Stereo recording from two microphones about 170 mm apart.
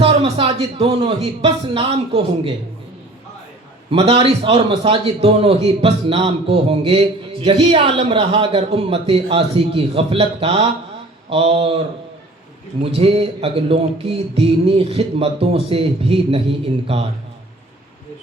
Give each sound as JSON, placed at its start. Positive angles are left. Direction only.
{"t": 0.0, "sound": "a man's voice", "side_deg": -35}
{"t": 3.9, "sound": "a man's voice", "side_deg": -35}
{"t": 12.8, "sound": "a man's voice", "side_deg": -35}